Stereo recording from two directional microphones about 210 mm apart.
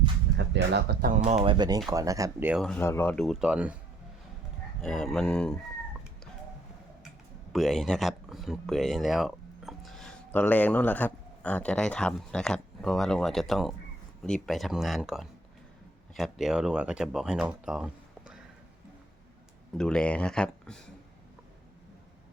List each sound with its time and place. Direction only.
0.3 s speech: 55° right (ahead or behind); by 3.8 s 5° right (ahead or behind)
4.8 s speech: centre (ahead or behind)
7.5 s speech: centre (ahead or behind)
19.7 s speech: 5° left (ahead or behind)